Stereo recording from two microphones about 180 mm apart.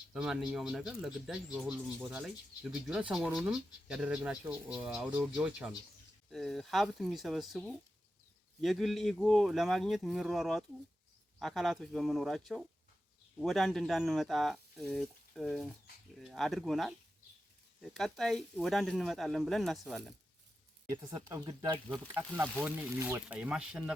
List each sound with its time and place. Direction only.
0.1 s speech: 5° right (ahead or behind)
17.9 s speech: centre (ahead or behind)
21.0 s speech: 20° right (ahead or behind); by 23.9 s 5° right (ahead or behind)